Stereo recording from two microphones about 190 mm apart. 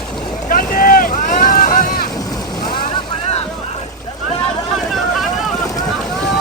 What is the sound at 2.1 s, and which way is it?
Boat, 20° left (ahead or behind).